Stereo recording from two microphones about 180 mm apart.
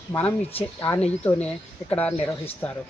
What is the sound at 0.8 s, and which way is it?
Speech, 10° left (ahead or behind).